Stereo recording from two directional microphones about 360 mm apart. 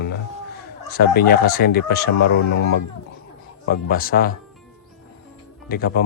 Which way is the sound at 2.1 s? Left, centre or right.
Left.